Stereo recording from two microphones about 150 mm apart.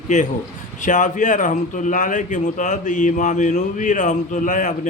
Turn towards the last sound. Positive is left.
turn(degrees=60)  # may be behind; listen again after turning